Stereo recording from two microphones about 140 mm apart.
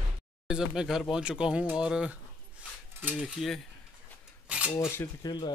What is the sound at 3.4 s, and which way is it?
Speech, 5° right (ahead or behind).